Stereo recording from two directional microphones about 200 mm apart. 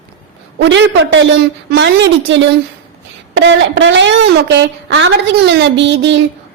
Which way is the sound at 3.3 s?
70° right (ahead or behind).